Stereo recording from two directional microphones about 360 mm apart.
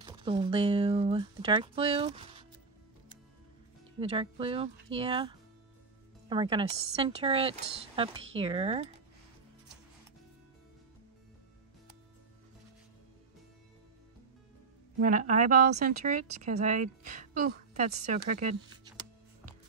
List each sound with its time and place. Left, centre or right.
0.0 s speech: centre
4.0 s speech: centre
15.0 s a woman's voice: right